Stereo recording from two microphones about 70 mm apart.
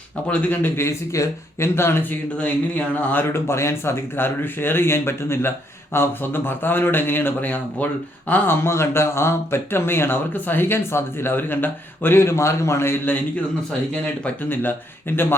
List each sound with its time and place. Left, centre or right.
0.3 s speech: left
0.8 s speech: left
2.4 s speech: left
13.9 s speech: centre
14.5 s speech: left